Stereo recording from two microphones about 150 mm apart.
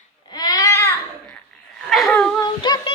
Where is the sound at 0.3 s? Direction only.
25° left (ahead or behind).